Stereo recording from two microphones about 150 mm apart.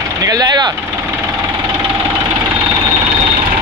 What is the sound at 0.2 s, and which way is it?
Vehicle, 25° right (ahead or behind).